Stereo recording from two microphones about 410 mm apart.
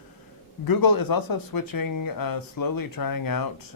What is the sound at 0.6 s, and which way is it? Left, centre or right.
Speech, left.